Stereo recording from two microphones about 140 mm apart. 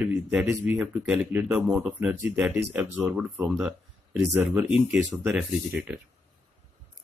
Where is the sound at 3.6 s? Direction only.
Centre (ahead or behind).